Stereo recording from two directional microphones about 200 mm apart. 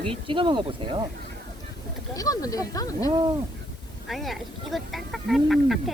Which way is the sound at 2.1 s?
15° left (ahead or behind).